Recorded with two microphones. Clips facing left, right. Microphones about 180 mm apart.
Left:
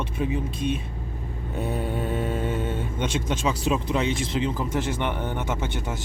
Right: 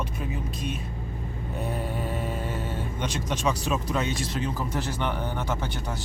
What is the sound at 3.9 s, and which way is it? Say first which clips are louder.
A man's voice: left 3 dB; 25° left (ahead or behind).